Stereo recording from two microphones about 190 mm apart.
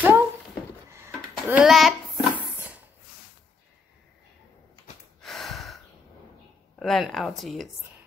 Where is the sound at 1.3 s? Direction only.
5° right (ahead or behind).